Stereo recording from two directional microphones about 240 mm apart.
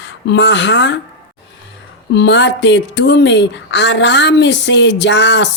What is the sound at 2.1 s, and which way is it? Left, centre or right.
A woman's voice, left.